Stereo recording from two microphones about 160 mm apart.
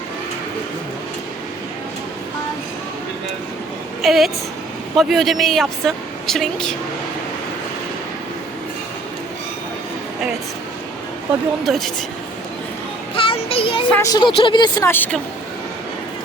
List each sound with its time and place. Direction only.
4.0 s a woman's voice: centre (ahead or behind)
11.6 s a woman's voice: centre (ahead or behind)
13.1 s child singing: 35° left (ahead or behind)
13.9 s speech: 20° left (ahead or behind)
14.8 s speech: 10° left (ahead or behind)